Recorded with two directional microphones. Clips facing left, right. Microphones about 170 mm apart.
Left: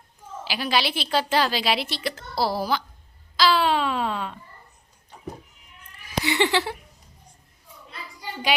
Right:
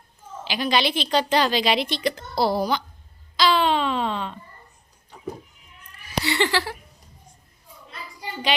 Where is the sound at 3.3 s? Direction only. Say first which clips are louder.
Right 1 dB; 5° left (ahead or behind).